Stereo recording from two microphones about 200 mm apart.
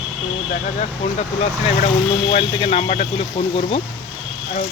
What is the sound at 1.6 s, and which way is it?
Speech, 30° left (ahead or behind).